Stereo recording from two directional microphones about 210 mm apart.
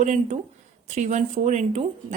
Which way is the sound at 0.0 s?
35° right (ahead or behind).